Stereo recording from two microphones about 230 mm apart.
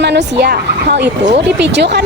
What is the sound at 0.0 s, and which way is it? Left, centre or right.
Speech, right.